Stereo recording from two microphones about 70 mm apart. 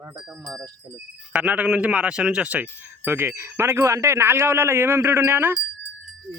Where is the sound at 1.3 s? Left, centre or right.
Right.